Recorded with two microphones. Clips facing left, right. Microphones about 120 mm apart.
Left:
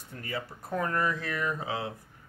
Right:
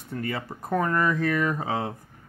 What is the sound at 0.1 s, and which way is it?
Speech, 60° right (ahead or behind).